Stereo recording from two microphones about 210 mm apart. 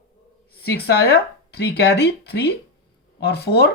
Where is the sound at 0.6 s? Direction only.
50° left (ahead or behind).